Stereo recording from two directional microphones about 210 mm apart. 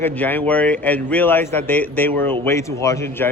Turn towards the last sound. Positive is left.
turn(degrees=15)  # may be behind; listen again after turning